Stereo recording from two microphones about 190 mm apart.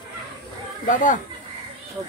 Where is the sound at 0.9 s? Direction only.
40° left (ahead or behind).